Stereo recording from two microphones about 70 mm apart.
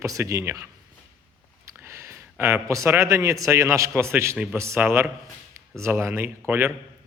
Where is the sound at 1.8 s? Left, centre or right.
Right.